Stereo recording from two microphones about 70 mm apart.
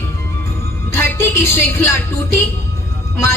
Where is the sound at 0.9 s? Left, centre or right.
Left.